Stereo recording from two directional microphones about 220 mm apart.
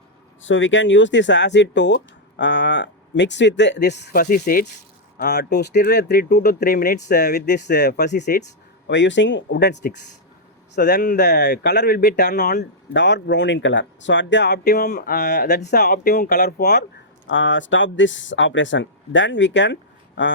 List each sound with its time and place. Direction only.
0.4 s speech: 60° left (ahead or behind)
17.2 s speech: 60° left (ahead or behind)